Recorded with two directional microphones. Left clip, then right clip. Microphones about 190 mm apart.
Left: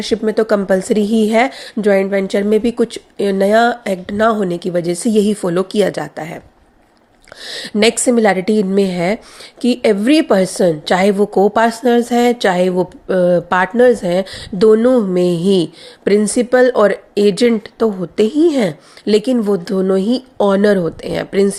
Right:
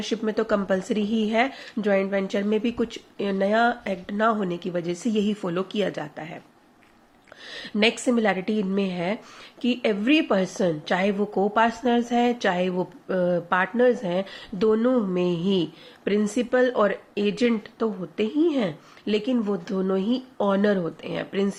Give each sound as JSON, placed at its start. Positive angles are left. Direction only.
{"t": 0.0, "sound": "a woman's voice", "side_deg": 35}
{"t": 7.4, "sound": "a woman's voice", "side_deg": 45}